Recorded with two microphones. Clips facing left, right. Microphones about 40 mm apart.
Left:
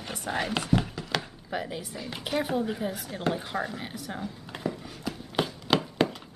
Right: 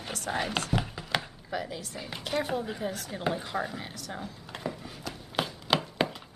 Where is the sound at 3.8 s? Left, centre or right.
Centre.